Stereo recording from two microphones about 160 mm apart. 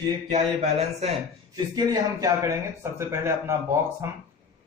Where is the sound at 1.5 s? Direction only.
25° right (ahead or behind).